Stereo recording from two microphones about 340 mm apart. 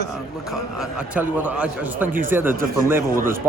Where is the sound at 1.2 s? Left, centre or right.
Centre.